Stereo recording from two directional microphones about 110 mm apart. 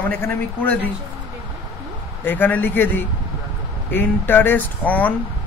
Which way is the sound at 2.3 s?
15° left (ahead or behind).